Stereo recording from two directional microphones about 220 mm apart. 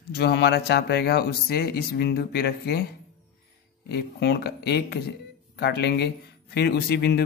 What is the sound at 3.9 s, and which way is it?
Speech, 50° left (ahead or behind).